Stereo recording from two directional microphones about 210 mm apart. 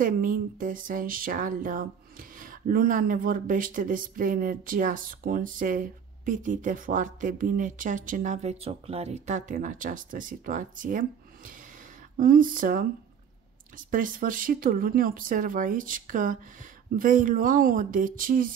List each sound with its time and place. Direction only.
0.0 s speech: 40° right (ahead or behind)